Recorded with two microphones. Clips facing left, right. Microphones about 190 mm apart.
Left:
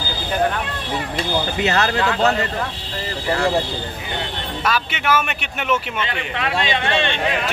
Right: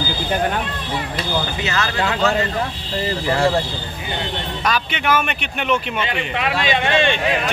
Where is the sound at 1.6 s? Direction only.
40° left (ahead or behind).